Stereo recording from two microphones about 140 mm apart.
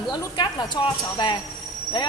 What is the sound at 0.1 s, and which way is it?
Speech, 30° left (ahead or behind).